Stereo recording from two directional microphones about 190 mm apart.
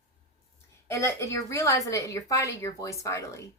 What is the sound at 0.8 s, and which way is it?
A woman's voice, 15° left (ahead or behind).